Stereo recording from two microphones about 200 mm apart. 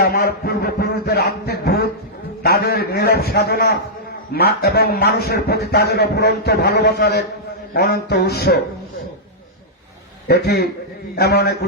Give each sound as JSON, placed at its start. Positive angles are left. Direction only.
{"t": 0.0, "sound": "a sound", "side_deg": 50}
{"t": 4.4, "sound": "a man's voice", "side_deg": 50}
{"t": 10.2, "sound": "a man's voice", "side_deg": 55}